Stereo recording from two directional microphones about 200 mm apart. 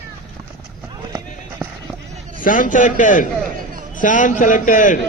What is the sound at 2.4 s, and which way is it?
A man's voice, 40° left (ahead or behind).